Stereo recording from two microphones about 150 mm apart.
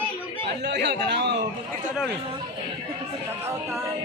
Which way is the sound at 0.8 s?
90° right.